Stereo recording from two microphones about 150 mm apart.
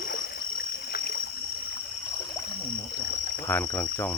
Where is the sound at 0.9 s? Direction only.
90° left.